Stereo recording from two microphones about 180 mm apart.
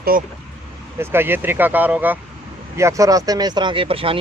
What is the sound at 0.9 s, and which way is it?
Speech, 10° right (ahead or behind).